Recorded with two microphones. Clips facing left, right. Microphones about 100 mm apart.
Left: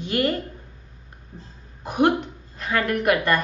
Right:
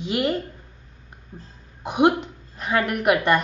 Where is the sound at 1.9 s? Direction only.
20° right (ahead or behind).